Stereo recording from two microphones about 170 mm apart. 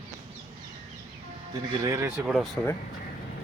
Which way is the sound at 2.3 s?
Centre (ahead or behind).